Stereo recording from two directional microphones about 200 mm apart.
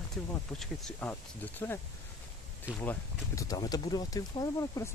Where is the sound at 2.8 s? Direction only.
10° left (ahead or behind).